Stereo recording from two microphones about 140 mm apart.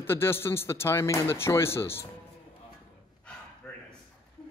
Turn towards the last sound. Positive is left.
turn(degrees=5)  # may be behind; listen again after turning